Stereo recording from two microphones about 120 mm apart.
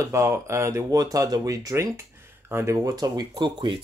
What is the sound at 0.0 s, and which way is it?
Speech, 25° right (ahead or behind).